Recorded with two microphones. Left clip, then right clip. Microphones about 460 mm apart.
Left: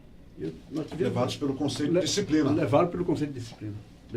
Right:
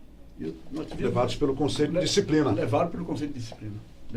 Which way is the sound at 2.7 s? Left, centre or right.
Left.